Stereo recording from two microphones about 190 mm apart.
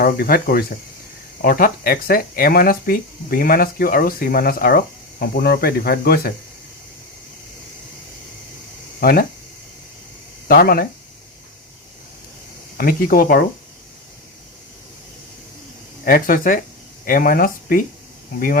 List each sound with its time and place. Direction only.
0.0 s speech: 55° left (ahead or behind)
9.0 s speech: 50° left (ahead or behind)
10.5 s speech: 50° left (ahead or behind)
12.7 s speech: 50° left (ahead or behind)
16.0 s speech: 50° left (ahead or behind)